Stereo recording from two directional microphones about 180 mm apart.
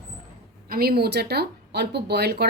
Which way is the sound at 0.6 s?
55° right (ahead or behind).